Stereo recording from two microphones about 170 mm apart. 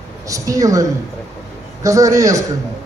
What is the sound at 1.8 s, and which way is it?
Speech, 20° right (ahead or behind).